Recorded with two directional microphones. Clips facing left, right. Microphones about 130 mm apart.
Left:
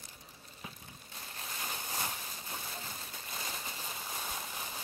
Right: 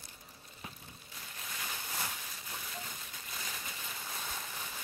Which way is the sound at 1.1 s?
30° left (ahead or behind).